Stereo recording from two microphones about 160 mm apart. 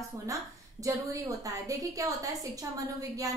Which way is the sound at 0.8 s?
20° right (ahead or behind).